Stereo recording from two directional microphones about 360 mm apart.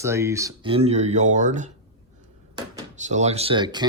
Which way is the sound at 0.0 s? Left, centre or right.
Centre.